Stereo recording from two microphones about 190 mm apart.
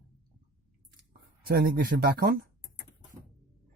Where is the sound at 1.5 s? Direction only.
50° right (ahead or behind).